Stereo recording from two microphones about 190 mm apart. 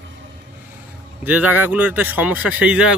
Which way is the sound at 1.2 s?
10° right (ahead or behind).